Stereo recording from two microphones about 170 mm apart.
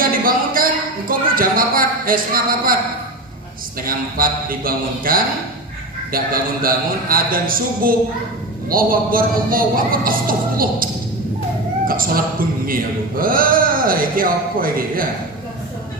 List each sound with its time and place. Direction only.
0.0 s a sound: 55° right (ahead or behind)
3.8 s a man's voice: 55° right (ahead or behind)
11.9 s a man's voice: 55° right (ahead or behind)